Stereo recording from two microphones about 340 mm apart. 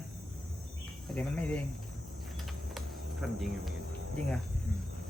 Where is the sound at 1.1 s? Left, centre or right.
Centre.